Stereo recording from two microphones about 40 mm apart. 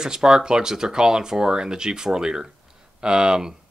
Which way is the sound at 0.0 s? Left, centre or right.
Centre.